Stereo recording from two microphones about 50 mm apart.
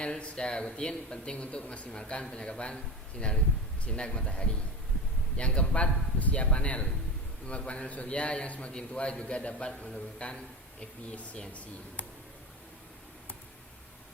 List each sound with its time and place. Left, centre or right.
0.0 s speech: centre
3.8 s speech: centre